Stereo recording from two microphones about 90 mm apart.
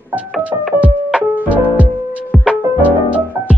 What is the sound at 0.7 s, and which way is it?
Music, 15° right (ahead or behind).